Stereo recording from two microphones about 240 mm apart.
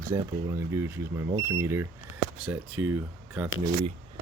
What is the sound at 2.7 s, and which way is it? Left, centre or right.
Speech, right.